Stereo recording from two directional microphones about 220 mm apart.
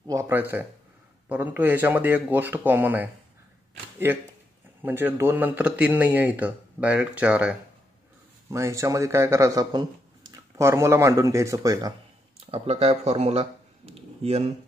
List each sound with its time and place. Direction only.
0.0 s a man's voice: 15° right (ahead or behind)
4.8 s a man's voice: 10° right (ahead or behind); by 14.5 s 30° right (ahead or behind)